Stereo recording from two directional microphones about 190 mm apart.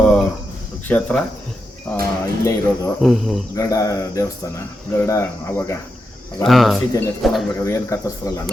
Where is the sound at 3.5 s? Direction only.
15° left (ahead or behind).